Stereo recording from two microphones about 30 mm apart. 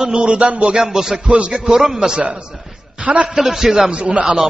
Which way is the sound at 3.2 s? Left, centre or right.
Centre.